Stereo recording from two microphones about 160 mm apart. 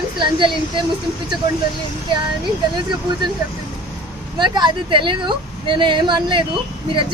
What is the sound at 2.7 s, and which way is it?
Speech, 25° right (ahead or behind).